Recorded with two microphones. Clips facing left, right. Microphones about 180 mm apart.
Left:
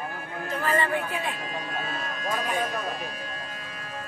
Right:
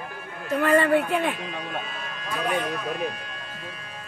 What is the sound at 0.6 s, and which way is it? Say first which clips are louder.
Speech: right 7 dB; 70° right (ahead or behind).